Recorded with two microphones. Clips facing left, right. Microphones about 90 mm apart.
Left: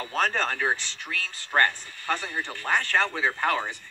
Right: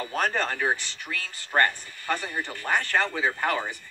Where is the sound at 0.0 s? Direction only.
15° right (ahead or behind).